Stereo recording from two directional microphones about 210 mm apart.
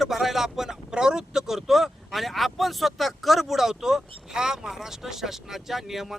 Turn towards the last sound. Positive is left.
turn(degrees=0)  # may be behind; listen again after turning